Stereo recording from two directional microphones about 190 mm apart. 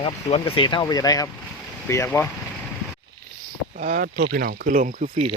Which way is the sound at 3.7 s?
45° right (ahead or behind).